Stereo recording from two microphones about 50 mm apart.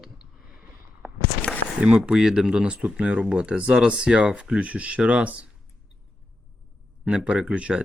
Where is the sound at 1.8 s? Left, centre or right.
Centre.